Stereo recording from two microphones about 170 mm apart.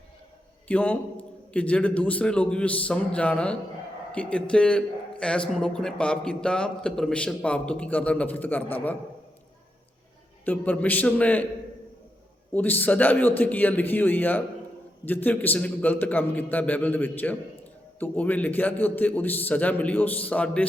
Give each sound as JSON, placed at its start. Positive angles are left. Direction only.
{"t": 0.7, "sound": "a man's voice", "side_deg": 10}
{"t": 10.4, "sound": "a man's voice", "side_deg": 10}
{"t": 12.5, "sound": "a man's voice", "side_deg": 10}